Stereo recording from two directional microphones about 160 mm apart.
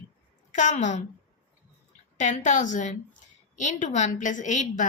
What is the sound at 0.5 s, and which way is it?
Speech, 50° left (ahead or behind).